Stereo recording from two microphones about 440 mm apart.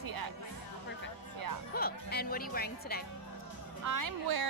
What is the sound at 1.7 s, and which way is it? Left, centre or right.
A woman's voice, left.